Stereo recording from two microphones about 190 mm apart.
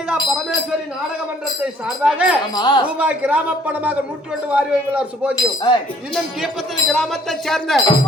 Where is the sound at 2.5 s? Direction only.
20° left (ahead or behind).